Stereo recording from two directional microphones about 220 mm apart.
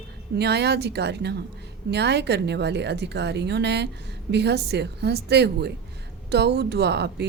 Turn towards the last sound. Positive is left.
turn(degrees=-50)  # may be behind; listen again after turning